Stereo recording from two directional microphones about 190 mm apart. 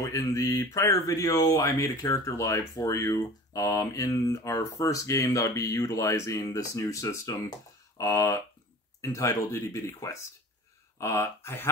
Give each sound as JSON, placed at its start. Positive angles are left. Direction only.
{"t": 0.0, "sound": "speech", "side_deg": 15}